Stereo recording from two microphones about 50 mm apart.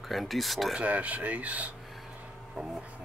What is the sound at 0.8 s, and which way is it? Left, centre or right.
Speech, right.